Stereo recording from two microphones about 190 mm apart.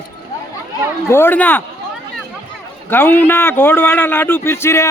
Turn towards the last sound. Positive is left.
turn(degrees=15)  # may be behind; listen again after turning